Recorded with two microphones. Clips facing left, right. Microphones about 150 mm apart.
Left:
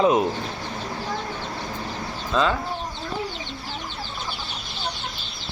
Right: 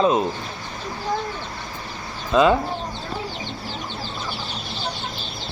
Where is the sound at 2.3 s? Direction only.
15° right (ahead or behind).